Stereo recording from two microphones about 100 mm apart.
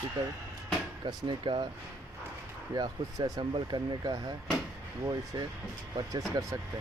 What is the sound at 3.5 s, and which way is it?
Speech, 50° right (ahead or behind).